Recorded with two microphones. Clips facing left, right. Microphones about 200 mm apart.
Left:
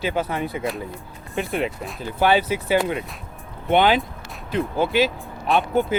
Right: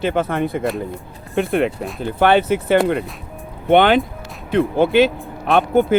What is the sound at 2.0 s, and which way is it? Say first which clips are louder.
Speech: right 4 dB; 55° right (ahead or behind).